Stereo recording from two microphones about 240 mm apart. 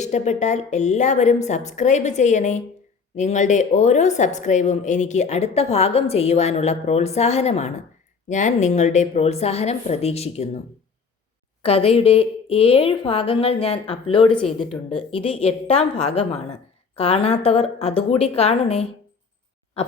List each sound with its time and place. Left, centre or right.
0.0 s a woman's voice: left
11.6 s a woman's voice: left
19.8 s a sound: left